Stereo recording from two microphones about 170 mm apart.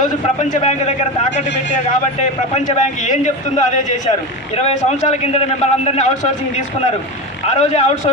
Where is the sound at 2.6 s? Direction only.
45° left (ahead or behind).